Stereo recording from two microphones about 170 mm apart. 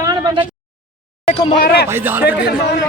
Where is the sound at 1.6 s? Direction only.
65° left (ahead or behind).